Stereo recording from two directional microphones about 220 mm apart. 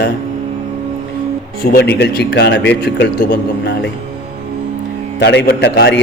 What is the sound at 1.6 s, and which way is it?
A man's voice, 40° left (ahead or behind).